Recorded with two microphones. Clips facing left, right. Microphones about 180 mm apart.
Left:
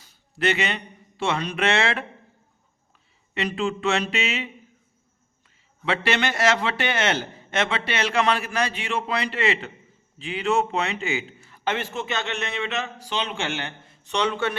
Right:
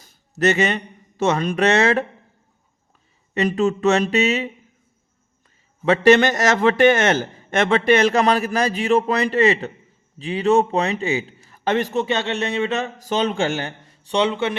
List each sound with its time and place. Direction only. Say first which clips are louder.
0.0 s a man's voice: right 6 dB; 40° right (ahead or behind)
3.3 s a man's voice: right 7 dB; 40° right (ahead or behind)
5.8 s a man's voice: right 10 dB; 45° right (ahead or behind); by 14.5 s 20° right (ahead or behind)